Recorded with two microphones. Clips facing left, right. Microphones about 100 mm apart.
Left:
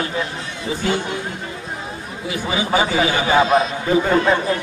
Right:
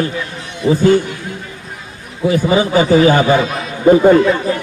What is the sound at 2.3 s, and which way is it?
Speech, 40° right (ahead or behind).